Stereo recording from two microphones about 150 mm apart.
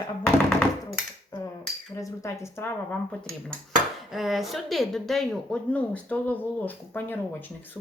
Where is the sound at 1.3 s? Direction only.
25° left (ahead or behind).